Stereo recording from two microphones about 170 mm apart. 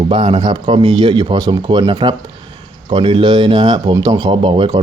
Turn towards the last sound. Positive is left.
turn(degrees=-30)  # may be behind; listen again after turning